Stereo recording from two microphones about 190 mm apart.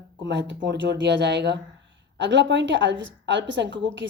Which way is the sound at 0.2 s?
65° right (ahead or behind).